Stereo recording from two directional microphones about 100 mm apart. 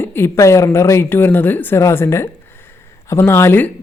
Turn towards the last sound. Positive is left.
turn(degrees=20)  # may be behind; listen again after turning